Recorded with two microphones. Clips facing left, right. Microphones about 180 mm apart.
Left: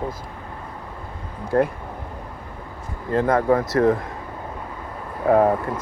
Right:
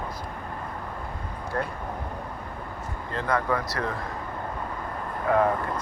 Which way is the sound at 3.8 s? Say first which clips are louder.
Left 13 dB; 35° left (ahead or behind).